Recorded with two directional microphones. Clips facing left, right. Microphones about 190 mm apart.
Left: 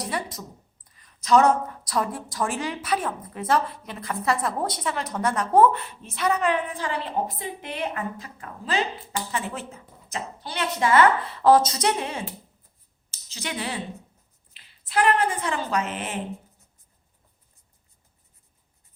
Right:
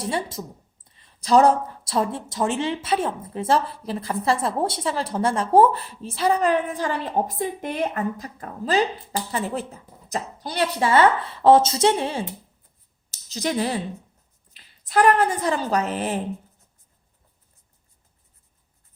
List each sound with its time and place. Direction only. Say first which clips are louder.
0.0 s a woman's voice: right 4 dB; 25° right (ahead or behind)